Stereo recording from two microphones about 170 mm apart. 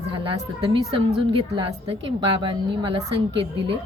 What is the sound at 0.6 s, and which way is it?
A woman's voice, 30° right (ahead or behind).